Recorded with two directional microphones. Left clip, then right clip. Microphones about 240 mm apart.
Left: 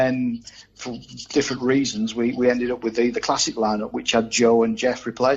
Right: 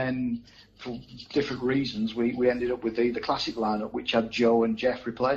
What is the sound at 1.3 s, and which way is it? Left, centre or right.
Speech, left.